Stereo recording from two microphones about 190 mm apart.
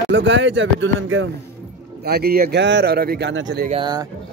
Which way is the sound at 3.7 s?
25° right (ahead or behind).